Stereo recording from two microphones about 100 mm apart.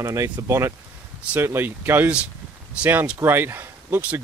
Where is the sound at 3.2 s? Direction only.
25° right (ahead or behind).